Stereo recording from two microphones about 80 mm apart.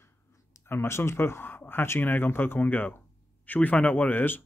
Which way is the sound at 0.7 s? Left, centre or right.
Left.